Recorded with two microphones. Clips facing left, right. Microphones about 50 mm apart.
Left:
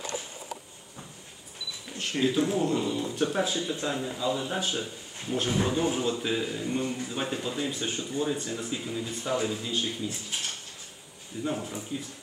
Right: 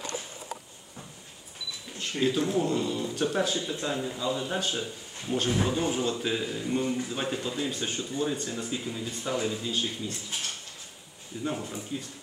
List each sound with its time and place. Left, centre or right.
2.1 s speech: centre
11.4 s speech: centre